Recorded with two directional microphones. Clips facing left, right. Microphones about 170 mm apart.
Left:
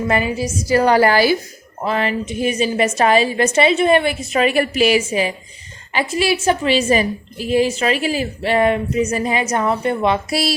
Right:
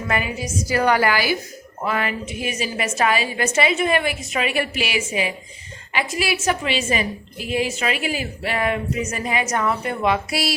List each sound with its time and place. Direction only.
0.1 s a woman's voice: 30° left (ahead or behind)